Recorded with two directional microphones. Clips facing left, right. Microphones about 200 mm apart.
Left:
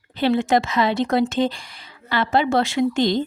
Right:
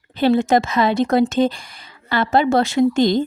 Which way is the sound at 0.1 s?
45° right (ahead or behind).